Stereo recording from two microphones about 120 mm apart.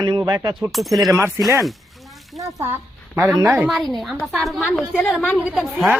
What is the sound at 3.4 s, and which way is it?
Speech, 15° right (ahead or behind).